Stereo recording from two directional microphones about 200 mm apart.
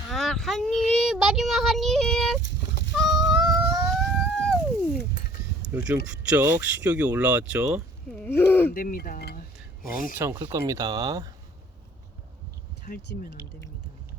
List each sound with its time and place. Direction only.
0.1 s a sound: centre (ahead or behind)
0.7 s speech: 35° left (ahead or behind)
0.9 s child singing: centre (ahead or behind)
3.1 s a sound: centre (ahead or behind)
5.7 s child singing: 5° right (ahead or behind)
6.1 s speech: 5° right (ahead or behind)
8.1 s speech: 10° left (ahead or behind)
8.7 s speech: 45° left (ahead or behind)
10.2 s speech: 10° right (ahead or behind)
12.8 s speech: 50° left (ahead or behind)